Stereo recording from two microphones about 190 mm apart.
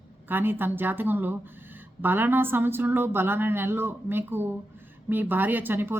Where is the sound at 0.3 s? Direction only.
10° right (ahead or behind).